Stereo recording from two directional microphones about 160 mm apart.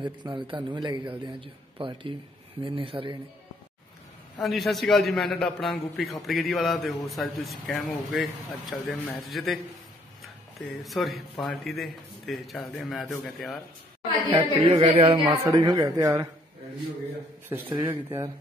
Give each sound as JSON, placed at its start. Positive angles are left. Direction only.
{"t": 0.0, "sound": "a man's voice", "side_deg": -30}
{"t": 4.4, "sound": "a man's voice", "side_deg": 0}
{"t": 10.8, "sound": "a man's voice", "side_deg": 0}
{"t": 14.3, "sound": "speech", "side_deg": -30}
{"t": 15.1, "sound": "a man's voice", "side_deg": -20}
{"t": 17.5, "sound": "a man's voice", "side_deg": -15}